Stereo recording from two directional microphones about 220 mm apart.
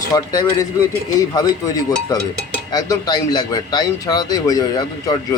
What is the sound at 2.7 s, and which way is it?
A man's voice, 15° left (ahead or behind).